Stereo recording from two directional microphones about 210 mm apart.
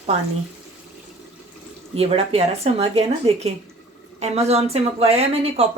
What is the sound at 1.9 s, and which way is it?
Speech, 30° right (ahead or behind).